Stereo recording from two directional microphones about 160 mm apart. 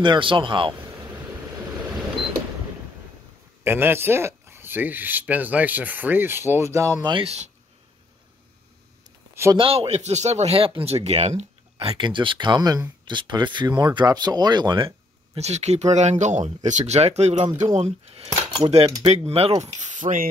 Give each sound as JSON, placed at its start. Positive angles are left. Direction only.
{"t": 0.0, "sound": "speech", "side_deg": -30}
{"t": 3.6, "sound": "speech", "side_deg": -15}
{"t": 7.2, "sound": "speech", "side_deg": -45}
{"t": 9.3, "sound": "a sound", "side_deg": -15}
{"t": 9.6, "sound": "speech", "side_deg": -40}
{"t": 15.3, "sound": "speech", "side_deg": -45}
{"t": 19.8, "sound": "speech", "side_deg": -50}